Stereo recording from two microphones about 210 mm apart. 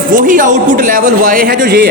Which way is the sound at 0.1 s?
40° right (ahead or behind).